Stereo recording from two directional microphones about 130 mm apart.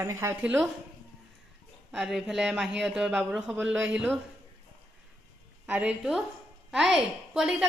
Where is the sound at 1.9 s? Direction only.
5° right (ahead or behind).